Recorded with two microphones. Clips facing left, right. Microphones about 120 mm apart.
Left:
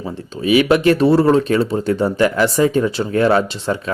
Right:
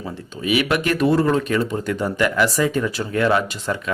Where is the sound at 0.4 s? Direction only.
30° left (ahead or behind).